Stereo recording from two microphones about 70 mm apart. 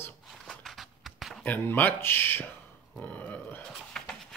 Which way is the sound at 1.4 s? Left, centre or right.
Left.